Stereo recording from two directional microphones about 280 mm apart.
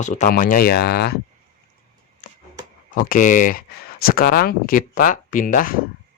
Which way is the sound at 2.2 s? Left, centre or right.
Left.